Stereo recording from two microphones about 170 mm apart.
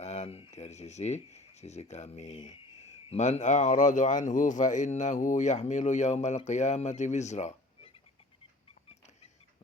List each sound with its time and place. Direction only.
0.0 s speech: 40° left (ahead or behind)